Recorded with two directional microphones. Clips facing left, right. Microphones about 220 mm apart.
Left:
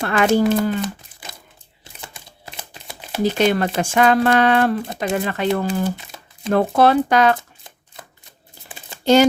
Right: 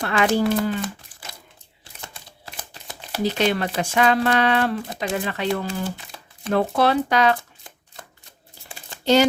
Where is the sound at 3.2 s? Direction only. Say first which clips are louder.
Left 4 dB; 50° left (ahead or behind).